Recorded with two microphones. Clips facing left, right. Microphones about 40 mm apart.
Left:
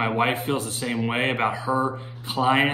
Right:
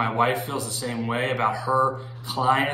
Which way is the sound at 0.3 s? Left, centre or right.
Left.